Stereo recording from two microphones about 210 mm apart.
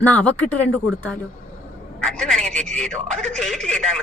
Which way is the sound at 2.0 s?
5° left (ahead or behind).